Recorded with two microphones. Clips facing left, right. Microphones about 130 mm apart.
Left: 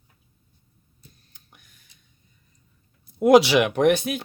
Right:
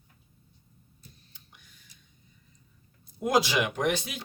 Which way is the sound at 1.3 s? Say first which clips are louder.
Left 1 dB; 50° left (ahead or behind).